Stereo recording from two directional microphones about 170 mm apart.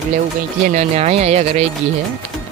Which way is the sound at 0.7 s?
40° right (ahead or behind).